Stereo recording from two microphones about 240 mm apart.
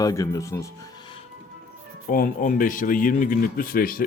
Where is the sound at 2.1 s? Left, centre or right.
Left.